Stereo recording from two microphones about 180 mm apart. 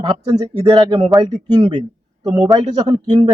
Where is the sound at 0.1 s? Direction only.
30° right (ahead or behind).